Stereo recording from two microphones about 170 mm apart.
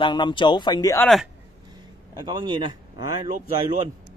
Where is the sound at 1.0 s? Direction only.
Centre (ahead or behind).